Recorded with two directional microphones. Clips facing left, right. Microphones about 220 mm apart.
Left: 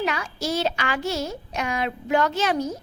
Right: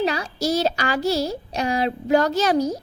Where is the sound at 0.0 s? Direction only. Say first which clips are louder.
Right 4 dB; 35° right (ahead or behind).